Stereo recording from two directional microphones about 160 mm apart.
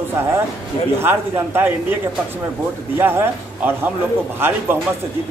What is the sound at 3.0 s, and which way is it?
Speech, 15° right (ahead or behind).